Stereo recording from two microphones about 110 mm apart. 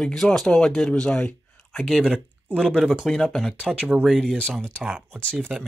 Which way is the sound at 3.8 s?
10° right (ahead or behind).